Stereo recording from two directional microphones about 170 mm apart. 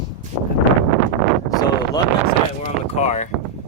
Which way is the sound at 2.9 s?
40° left (ahead or behind).